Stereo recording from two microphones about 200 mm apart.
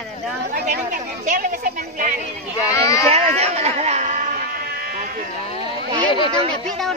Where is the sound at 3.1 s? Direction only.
30° right (ahead or behind).